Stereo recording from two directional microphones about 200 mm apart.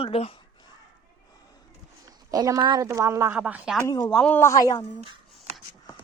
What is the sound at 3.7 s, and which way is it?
Speech, 15° left (ahead or behind).